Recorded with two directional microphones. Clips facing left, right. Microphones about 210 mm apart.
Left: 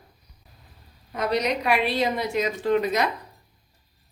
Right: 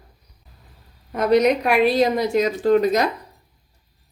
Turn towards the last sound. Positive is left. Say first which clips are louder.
# right 5 dB
turn(degrees=-40)  # may be behind; listen again after turning